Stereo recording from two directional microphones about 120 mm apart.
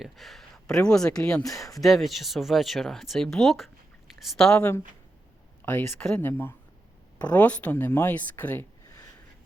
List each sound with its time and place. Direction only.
0.0 s speech: centre (ahead or behind)
5.6 s speech: 20° left (ahead or behind)
6.0 s speech: 5° left (ahead or behind)
6.2 s speech: 15° left (ahead or behind)